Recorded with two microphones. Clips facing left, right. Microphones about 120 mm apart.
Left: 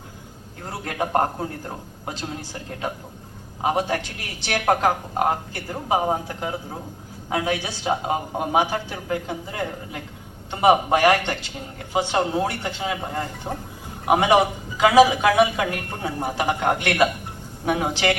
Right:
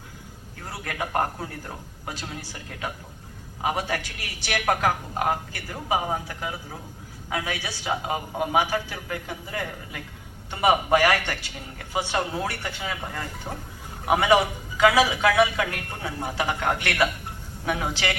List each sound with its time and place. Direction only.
0.6 s a woman's voice: 25° left (ahead or behind)
7.3 s a woman's voice: 25° left (ahead or behind)